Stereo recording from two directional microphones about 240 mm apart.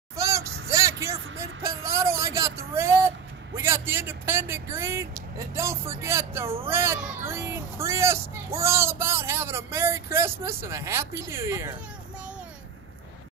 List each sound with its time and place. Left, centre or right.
0.1 s vehicle: centre
1.6 s a sound: centre
3.5 s speech: centre